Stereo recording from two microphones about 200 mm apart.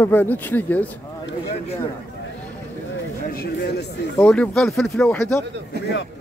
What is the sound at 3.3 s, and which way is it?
Speech, 50° left (ahead or behind).